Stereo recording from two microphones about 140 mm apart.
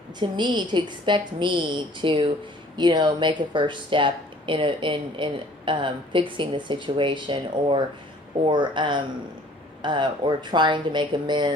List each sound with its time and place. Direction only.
0.2 s a woman's voice: 30° right (ahead or behind)